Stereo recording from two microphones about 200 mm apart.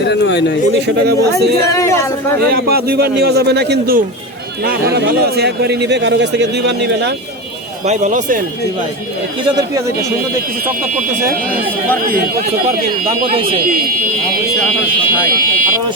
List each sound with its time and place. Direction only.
0.1 s a man's voice: 60° left (ahead or behind)
0.8 s a man's voice: 55° right (ahead or behind)
1.7 s speech: 15° left (ahead or behind)
2.4 s a man's voice: 50° right (ahead or behind)
7.9 s speech: 35° right (ahead or behind)
9.6 s speech: 20° right (ahead or behind)
15.5 s a man's voice: 45° right (ahead or behind)